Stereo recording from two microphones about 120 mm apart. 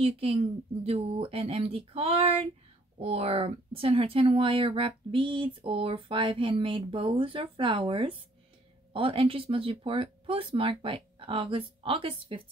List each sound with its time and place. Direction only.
0.0 s speech: 50° right (ahead or behind)